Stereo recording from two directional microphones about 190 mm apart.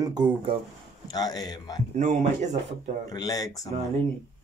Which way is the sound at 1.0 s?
20° left (ahead or behind).